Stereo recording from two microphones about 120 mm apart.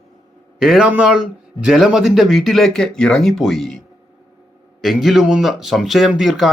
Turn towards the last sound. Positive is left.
turn(degrees=0)  # may be behind; listen again after turning